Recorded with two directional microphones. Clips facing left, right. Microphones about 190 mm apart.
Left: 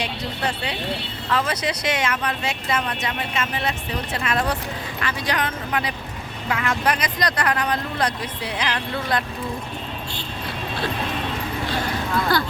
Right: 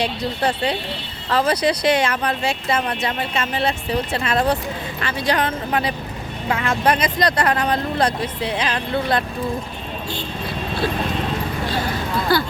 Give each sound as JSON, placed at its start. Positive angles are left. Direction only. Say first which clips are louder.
{"t": 0.0, "sound": "speech", "louder": "right 5 dB", "side_deg": -35}
{"t": 12.3, "sound": "speech", "louder": "right 4 dB", "side_deg": -5}